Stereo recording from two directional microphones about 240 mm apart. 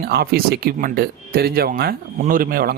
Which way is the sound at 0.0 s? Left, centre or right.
Right.